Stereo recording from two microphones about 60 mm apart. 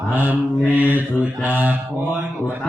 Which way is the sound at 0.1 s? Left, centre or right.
Right.